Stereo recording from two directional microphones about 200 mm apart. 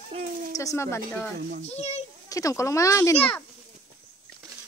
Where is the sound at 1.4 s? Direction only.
50° right (ahead or behind).